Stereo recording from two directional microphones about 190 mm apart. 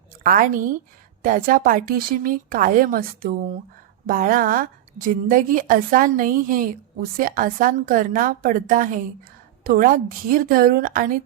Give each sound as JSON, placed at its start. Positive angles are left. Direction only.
{"t": 0.2, "sound": "a woman's voice", "side_deg": -45}